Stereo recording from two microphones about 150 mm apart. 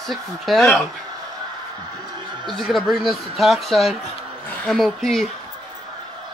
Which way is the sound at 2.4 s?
Centre (ahead or behind).